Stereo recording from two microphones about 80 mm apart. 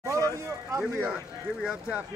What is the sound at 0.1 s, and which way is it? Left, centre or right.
Vehicle, right.